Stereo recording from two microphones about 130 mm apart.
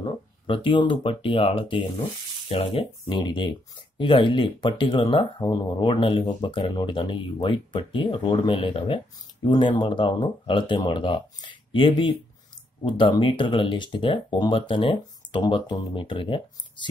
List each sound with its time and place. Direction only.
0.0 s speech: 40° left (ahead or behind)